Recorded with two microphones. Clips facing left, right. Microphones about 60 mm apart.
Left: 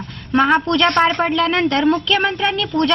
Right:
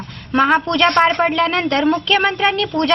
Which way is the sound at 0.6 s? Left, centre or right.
Right.